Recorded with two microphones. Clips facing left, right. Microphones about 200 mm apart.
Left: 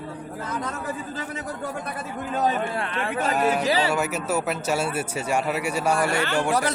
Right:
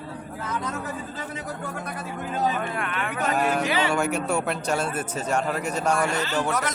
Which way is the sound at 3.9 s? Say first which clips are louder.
Right 1 dB; 5° left (ahead or behind).